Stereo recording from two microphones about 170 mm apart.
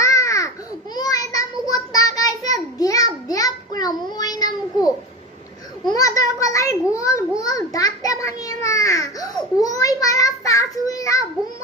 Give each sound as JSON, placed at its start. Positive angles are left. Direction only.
{"t": 0.0, "sound": "babbling", "side_deg": 20}
{"t": 0.9, "sound": "child singing", "side_deg": 20}
{"t": 5.8, "sound": "a sound", "side_deg": 20}